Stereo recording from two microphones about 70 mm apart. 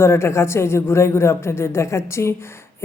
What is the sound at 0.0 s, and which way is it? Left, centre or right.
A woman's voice, left.